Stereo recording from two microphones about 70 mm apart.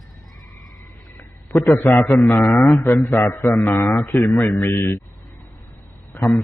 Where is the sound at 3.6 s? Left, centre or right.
Left.